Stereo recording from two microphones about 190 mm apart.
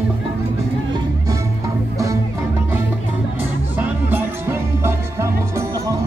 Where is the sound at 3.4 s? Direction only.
10° right (ahead or behind).